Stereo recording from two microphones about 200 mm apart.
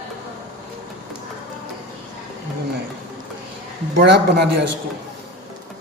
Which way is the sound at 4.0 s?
55° right (ahead or behind).